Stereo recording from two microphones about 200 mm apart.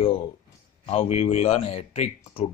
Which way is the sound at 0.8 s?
30° left (ahead or behind).